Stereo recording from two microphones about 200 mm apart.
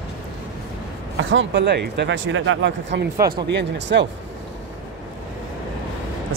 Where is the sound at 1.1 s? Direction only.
70° right (ahead or behind).